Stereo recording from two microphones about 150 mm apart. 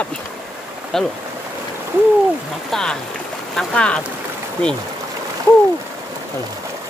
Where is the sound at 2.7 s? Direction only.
5° left (ahead or behind).